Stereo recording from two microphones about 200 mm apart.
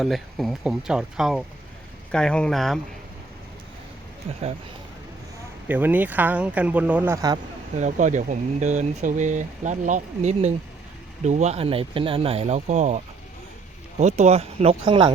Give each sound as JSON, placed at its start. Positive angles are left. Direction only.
{"t": 0.0, "sound": "speech", "side_deg": 0}
{"t": 5.6, "sound": "speech", "side_deg": -10}
{"t": 7.8, "sound": "speech", "side_deg": -35}
{"t": 14.0, "sound": "speech", "side_deg": -35}